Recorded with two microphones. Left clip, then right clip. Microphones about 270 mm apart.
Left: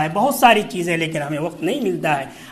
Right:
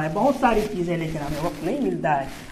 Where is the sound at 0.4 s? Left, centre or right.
Left.